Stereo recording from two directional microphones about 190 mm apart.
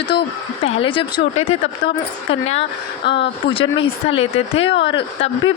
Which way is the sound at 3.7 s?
85° left.